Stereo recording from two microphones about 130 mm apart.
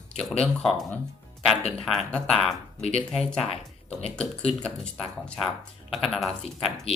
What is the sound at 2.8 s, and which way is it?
Speech, 50° left (ahead or behind).